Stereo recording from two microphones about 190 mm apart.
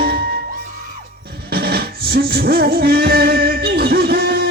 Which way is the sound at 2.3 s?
55° right (ahead or behind).